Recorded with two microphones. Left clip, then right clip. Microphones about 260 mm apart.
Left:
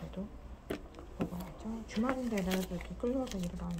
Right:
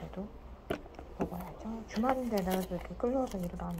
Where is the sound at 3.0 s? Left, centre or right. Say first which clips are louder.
Right 3 dB; centre.